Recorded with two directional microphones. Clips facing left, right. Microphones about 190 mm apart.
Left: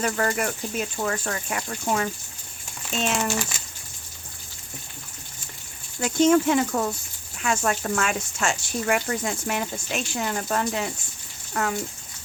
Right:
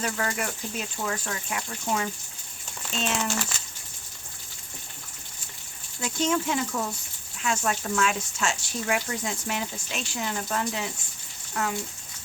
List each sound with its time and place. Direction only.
0.0 s speech: 50° left (ahead or behind)
3.5 s a sound: 15° left (ahead or behind)
6.0 s speech: 55° left (ahead or behind)